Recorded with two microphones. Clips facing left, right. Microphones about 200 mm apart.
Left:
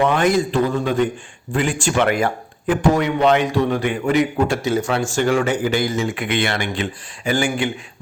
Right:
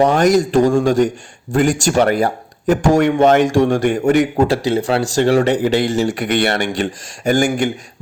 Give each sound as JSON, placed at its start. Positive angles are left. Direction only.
{"t": 0.0, "sound": "speech", "side_deg": -40}
{"t": 4.2, "sound": "speech", "side_deg": -35}